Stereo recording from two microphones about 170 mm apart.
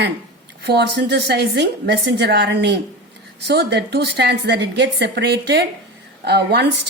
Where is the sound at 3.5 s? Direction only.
75° right (ahead or behind).